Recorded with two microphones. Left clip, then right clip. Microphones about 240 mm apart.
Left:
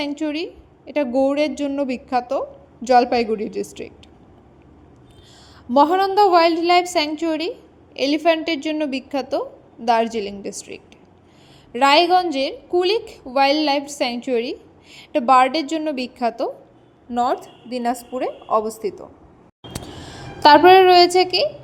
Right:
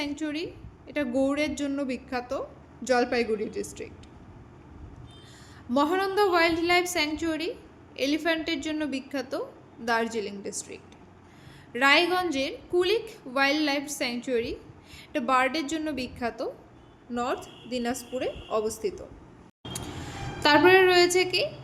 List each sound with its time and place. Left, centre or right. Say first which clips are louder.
0.0 s a woman's voice: left 7 dB; left
5.7 s a woman's voice: left 10 dB; left